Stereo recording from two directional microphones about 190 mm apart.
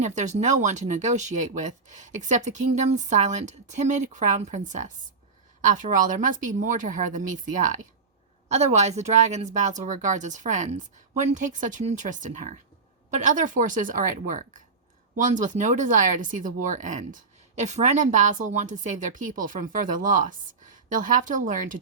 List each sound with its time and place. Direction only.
0.0 s speech: 40° right (ahead or behind)
8.4 s speech: 35° right (ahead or behind)